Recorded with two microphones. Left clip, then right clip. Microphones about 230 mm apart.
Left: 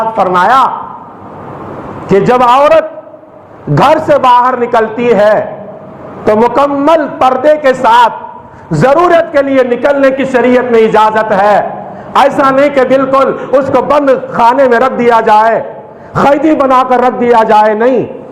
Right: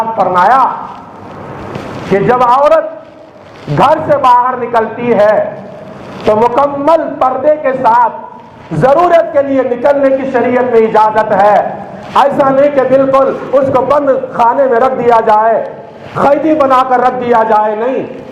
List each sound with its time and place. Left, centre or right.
0.2 s a man's voice: left
2.1 s a man's voice: left
10.0 s a man's voice: left